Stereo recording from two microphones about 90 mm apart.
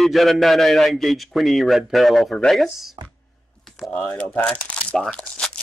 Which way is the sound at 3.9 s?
15° left (ahead or behind).